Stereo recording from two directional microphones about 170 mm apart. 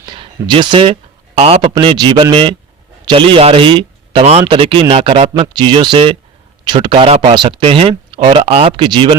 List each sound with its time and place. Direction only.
0.0 s a sound: 25° right (ahead or behind)
1.4 s speech: 35° right (ahead or behind)
1.7 s speech: 25° right (ahead or behind)